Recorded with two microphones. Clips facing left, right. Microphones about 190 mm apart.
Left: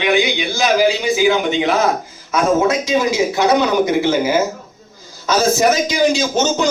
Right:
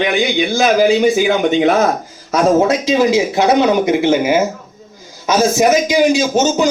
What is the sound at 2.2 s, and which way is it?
A man's voice, 35° right (ahead or behind).